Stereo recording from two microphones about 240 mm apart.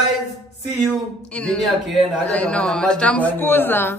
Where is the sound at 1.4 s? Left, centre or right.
Centre.